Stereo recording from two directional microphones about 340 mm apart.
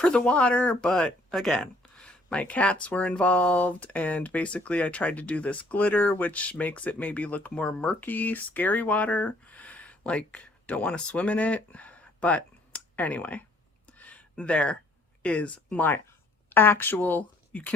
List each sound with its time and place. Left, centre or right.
0.0 s speech: centre
13.8 s a sound: centre
15.2 s speech: centre